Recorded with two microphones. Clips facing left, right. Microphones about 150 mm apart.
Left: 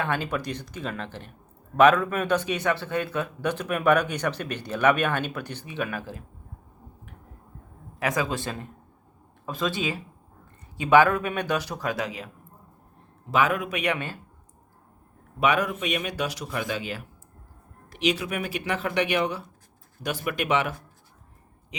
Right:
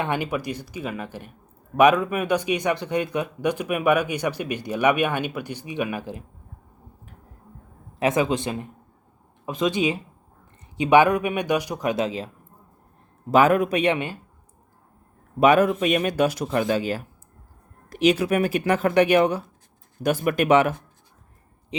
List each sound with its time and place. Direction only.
0.0 s a man's voice: 15° right (ahead or behind)
7.9 s a man's voice: 25° right (ahead or behind)
13.3 s speech: 45° right (ahead or behind); by 14.2 s 20° right (ahead or behind)
15.4 s speech: 45° right (ahead or behind)
21.7 s speech: 30° right (ahead or behind)